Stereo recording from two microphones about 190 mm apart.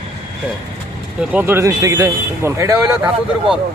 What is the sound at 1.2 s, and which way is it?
Speech, 10° right (ahead or behind).